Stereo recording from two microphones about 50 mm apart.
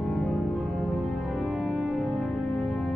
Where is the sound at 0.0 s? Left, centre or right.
Centre.